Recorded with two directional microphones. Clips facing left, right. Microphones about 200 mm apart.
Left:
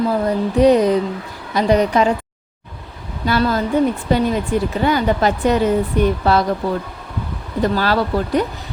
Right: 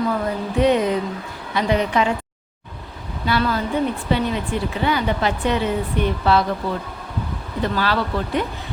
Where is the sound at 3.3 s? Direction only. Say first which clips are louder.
Left 4 dB; 40° left (ahead or behind).